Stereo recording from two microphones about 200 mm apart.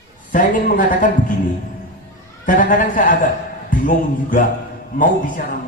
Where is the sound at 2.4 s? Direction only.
40° left (ahead or behind).